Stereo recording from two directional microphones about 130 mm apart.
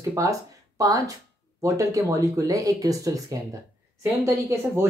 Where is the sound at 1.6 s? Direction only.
25° right (ahead or behind).